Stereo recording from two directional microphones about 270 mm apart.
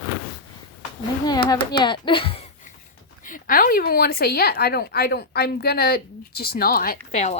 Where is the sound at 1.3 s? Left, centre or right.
Centre.